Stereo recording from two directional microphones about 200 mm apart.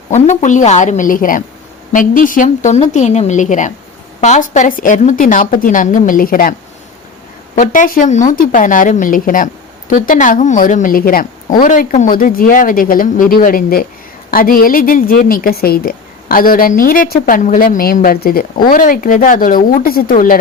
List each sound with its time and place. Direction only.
0.1 s a woman's voice: 35° left (ahead or behind)
7.5 s a woman's voice: 40° left (ahead or behind)